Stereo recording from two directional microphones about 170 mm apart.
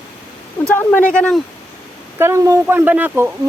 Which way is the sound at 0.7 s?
10° left (ahead or behind).